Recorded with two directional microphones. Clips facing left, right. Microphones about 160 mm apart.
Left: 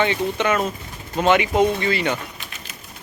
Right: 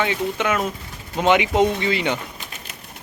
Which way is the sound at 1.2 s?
15° right (ahead or behind).